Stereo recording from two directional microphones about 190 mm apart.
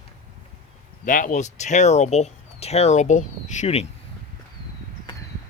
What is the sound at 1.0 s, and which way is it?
Speech, 45° left (ahead or behind).